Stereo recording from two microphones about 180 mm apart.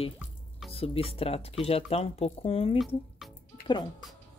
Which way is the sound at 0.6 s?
30° left (ahead or behind).